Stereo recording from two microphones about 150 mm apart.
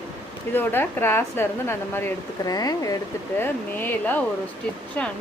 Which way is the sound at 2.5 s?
25° left (ahead or behind).